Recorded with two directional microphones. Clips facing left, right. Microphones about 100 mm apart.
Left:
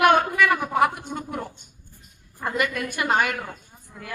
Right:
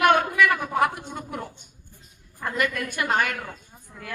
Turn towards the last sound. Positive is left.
turn(degrees=10)  # may be behind; listen again after turning